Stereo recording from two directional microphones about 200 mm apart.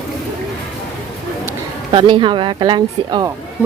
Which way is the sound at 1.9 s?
25° right (ahead or behind).